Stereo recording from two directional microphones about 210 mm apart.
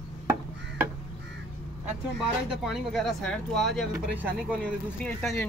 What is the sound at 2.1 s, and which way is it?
Speech, centre (ahead or behind).